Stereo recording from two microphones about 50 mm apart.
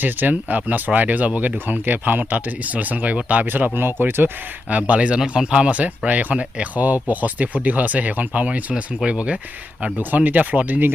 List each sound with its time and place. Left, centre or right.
0.0 s speech: right
3.4 s speech: right
4.7 s speech: right
10.0 s speech: right